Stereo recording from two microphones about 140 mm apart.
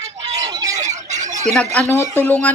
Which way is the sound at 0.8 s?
55° right (ahead or behind).